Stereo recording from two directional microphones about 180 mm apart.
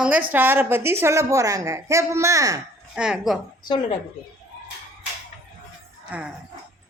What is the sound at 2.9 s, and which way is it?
Speech, 5° right (ahead or behind).